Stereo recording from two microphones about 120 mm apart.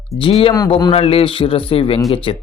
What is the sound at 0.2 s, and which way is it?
Speech, 50° left (ahead or behind).